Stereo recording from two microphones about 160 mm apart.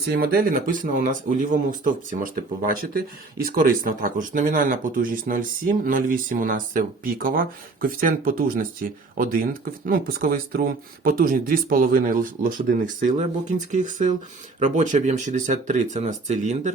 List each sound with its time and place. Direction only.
0.1 s speech: 70° right (ahead or behind); by 16.7 s 50° right (ahead or behind)